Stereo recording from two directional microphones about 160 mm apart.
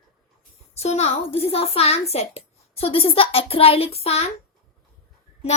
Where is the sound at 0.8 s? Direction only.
45° left (ahead or behind).